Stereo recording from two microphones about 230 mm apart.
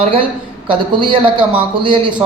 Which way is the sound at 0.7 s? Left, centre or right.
Right.